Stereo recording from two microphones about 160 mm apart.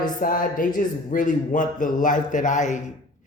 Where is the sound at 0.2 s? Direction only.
60° left (ahead or behind).